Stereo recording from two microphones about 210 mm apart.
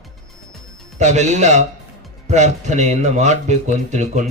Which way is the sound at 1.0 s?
35° right (ahead or behind).